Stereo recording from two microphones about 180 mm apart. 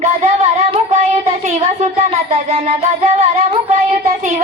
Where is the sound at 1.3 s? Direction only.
35° right (ahead or behind).